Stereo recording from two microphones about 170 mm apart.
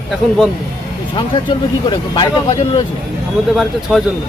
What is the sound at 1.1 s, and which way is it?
Speech, 30° left (ahead or behind).